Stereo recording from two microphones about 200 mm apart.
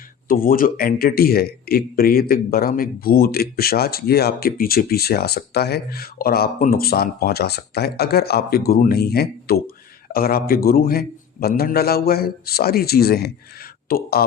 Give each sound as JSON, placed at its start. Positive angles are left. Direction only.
{"t": 0.3, "sound": "speech", "side_deg": 45}